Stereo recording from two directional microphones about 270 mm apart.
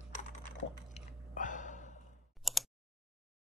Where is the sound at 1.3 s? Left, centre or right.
Left.